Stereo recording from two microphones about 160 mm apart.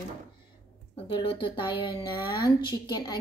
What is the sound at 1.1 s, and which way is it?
A woman's voice, 30° left (ahead or behind).